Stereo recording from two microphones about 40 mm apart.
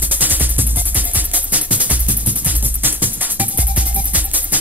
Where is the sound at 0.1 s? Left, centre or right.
Right.